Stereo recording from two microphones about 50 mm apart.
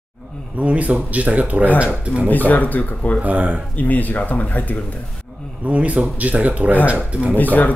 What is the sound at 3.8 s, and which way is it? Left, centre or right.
Speech, left.